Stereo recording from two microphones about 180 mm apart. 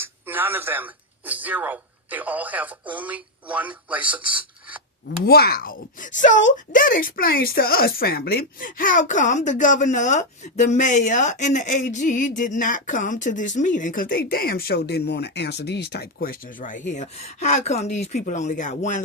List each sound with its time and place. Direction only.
0.0 s speech: 10° right (ahead or behind)
5.0 s speech: 65° left (ahead or behind); by 19.0 s 45° left (ahead or behind)